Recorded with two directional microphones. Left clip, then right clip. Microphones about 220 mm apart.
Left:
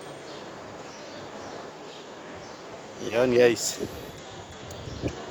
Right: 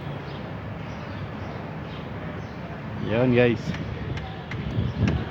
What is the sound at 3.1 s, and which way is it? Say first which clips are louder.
Speech: left 1 dB; 35° left (ahead or behind).